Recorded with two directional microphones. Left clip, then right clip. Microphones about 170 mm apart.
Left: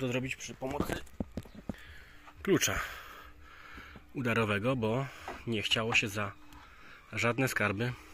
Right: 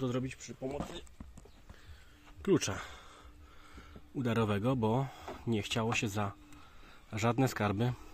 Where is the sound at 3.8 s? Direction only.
25° right (ahead or behind); by 8.0 s 40° right (ahead or behind).